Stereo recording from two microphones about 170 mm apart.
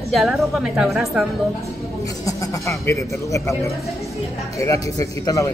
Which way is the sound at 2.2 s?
20° left (ahead or behind).